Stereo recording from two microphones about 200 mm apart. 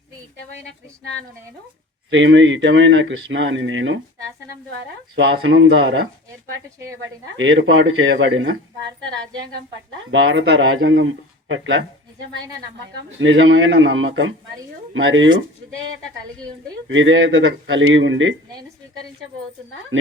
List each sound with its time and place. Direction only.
2.0 s speech: 65° right (ahead or behind)
5.1 s speech: 70° right (ahead or behind)
10.1 s speech: 60° right (ahead or behind)
13.1 s speech: 70° right (ahead or behind)
16.9 s speech: 70° right (ahead or behind)